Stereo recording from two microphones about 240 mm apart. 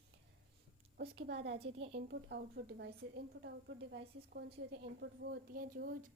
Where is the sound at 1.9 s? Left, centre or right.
Right.